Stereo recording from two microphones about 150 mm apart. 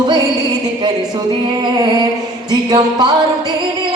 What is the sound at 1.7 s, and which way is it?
Speech, 30° right (ahead or behind).